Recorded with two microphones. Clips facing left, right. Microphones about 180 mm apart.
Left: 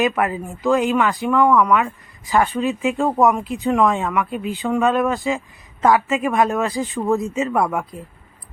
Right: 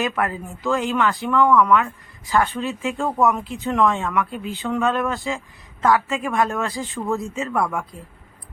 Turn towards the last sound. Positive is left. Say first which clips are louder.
# left 3 dB
turn(degrees=20)  # may be behind; listen again after turning